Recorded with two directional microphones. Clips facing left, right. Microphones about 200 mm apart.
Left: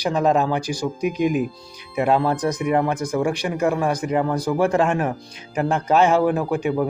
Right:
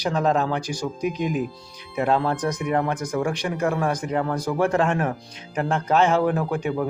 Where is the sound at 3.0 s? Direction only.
30° left (ahead or behind).